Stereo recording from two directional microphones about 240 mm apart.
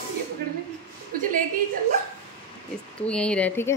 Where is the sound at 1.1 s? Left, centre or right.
Right.